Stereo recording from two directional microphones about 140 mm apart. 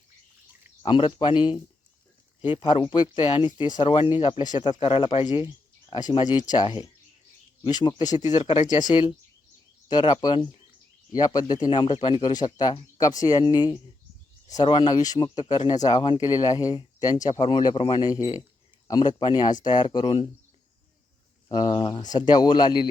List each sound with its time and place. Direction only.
0.8 s speech: 35° left (ahead or behind)
21.5 s speech: 35° left (ahead or behind)